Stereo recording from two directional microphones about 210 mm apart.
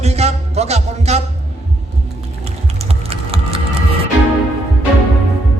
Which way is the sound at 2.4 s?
30° right (ahead or behind).